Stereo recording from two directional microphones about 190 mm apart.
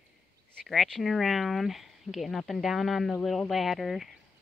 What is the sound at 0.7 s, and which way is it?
Speech, centre (ahead or behind).